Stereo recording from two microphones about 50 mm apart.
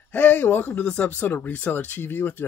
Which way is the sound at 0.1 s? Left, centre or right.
Left.